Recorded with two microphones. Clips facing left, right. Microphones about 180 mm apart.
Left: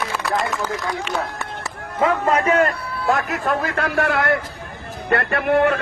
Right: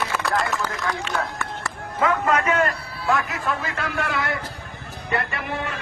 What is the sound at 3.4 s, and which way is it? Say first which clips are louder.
A man's voice: left 5 dB; 60° left (ahead or behind).